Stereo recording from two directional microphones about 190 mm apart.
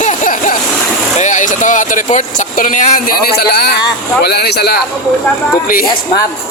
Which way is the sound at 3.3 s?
55° left (ahead or behind).